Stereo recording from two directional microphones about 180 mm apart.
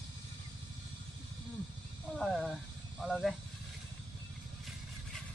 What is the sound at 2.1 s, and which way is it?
Snake, centre (ahead or behind).